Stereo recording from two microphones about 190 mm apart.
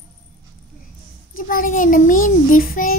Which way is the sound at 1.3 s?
50° left (ahead or behind).